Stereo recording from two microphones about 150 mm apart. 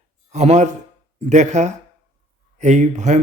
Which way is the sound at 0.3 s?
50° right (ahead or behind).